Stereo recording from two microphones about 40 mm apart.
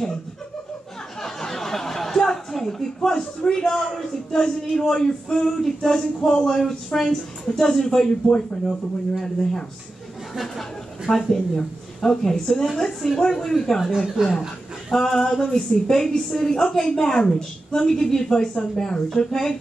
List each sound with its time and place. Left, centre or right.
1.2 s chuckle: centre
3.6 s speech: centre
4.3 s speech: centre
11.2 s speech: centre
13.9 s speech: centre
15.0 s speech: centre